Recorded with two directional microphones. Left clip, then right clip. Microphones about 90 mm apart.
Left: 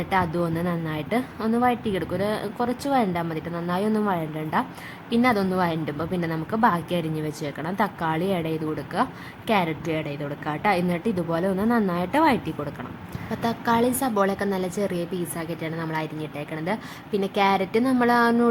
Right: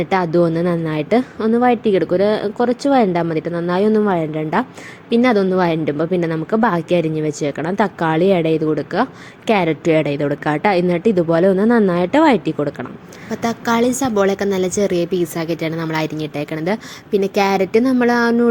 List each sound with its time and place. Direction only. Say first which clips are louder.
0.0 s a woman's voice: right 8 dB; 35° right (ahead or behind)
9.8 s a woman's voice: right 13 dB; 55° right (ahead or behind); by 12.7 s 40° right (ahead or behind)
13.3 s a woman's voice: right 5 dB; 20° right (ahead or behind)
15.4 s a woman's voice: right 9 dB; 40° right (ahead or behind)
16.2 s speech: right 9 dB; 60° right (ahead or behind)
16.6 s a woman's voice: right 7 dB; 40° right (ahead or behind)